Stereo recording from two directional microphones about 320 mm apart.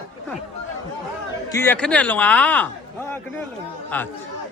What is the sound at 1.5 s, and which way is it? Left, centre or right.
A man's voice, centre.